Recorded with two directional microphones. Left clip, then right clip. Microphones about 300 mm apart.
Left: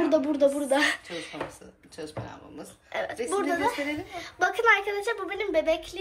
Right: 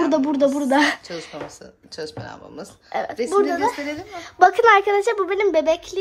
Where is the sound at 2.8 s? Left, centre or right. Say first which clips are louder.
Right 6 dB; right.